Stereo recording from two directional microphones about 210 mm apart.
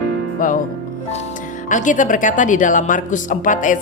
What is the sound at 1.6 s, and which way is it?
Speech, 35° left (ahead or behind).